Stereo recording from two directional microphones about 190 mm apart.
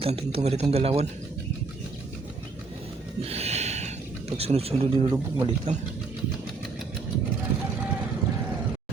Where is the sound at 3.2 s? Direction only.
35° right (ahead or behind).